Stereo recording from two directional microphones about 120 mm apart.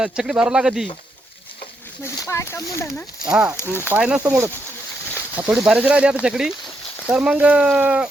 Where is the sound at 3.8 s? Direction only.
15° right (ahead or behind).